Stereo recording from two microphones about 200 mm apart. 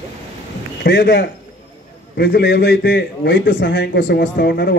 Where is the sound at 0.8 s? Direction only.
60° left (ahead or behind).